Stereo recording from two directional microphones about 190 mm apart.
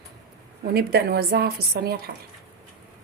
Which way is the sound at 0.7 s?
60° right (ahead or behind).